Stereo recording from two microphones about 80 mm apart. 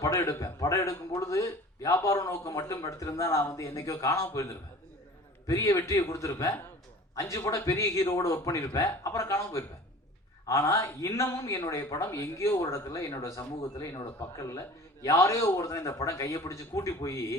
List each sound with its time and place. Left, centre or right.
0.2 s speech: left
5.5 s a man's voice: left